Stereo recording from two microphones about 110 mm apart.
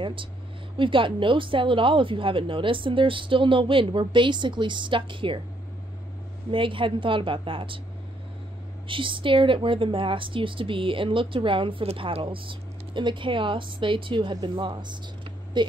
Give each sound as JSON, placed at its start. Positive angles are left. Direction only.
{"t": 0.0, "sound": "speech", "side_deg": -50}
{"t": 6.5, "sound": "speech", "side_deg": -50}
{"t": 8.8, "sound": "speech", "side_deg": -50}